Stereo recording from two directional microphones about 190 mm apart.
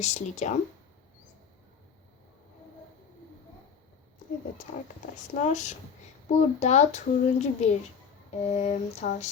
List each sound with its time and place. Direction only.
0.0 s a child's voice: 35° left (ahead or behind)
5.3 s a child's voice: 40° left (ahead or behind)